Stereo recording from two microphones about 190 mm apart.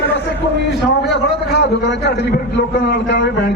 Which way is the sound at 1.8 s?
60° left (ahead or behind).